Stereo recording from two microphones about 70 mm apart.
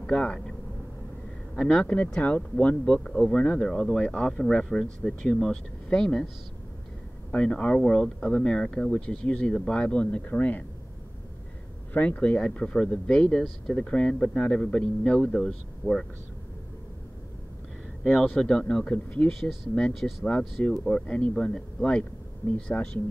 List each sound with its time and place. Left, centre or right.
0.0 s speech: centre
7.2 s speech: centre
11.9 s speech: left
18.0 s speech: centre
20.0 s speech: centre
20.6 s speech: left
22.7 s speech: left